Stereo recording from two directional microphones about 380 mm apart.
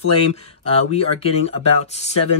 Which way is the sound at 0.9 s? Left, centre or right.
Centre.